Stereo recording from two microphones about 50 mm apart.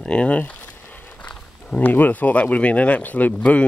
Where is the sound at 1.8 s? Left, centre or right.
Left.